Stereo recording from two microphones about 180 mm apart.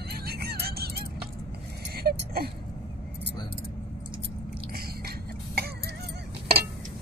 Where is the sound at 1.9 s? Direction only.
60° right (ahead or behind).